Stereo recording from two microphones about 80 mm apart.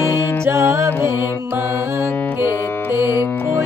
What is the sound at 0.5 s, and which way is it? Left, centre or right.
Music, right.